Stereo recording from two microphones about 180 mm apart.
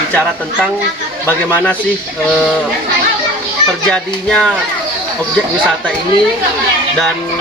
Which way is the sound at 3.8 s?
5° left (ahead or behind).